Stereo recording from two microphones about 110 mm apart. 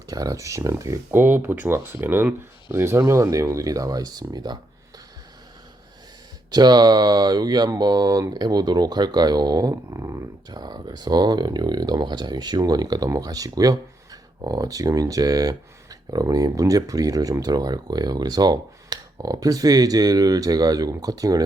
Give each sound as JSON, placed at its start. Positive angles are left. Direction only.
{"t": 0.1, "sound": "speech", "side_deg": -35}
{"t": 6.5, "sound": "speech", "side_deg": -40}